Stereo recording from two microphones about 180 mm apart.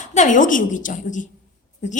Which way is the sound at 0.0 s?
40° left (ahead or behind).